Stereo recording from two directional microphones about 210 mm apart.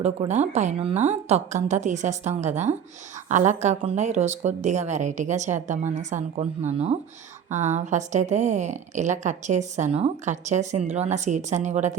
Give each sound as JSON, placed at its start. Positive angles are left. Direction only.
{"t": 0.0, "sound": "a woman's voice", "side_deg": -30}